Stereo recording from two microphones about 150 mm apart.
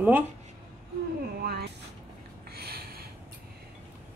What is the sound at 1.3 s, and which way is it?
Vehicle, 90° right.